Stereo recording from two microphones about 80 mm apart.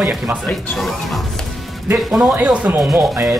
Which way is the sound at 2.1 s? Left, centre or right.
Right.